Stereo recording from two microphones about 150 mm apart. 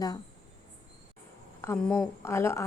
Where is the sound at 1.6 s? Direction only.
10° left (ahead or behind).